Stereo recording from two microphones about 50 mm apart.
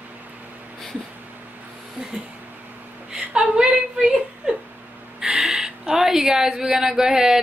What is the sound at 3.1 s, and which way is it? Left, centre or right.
A woman's voice, centre.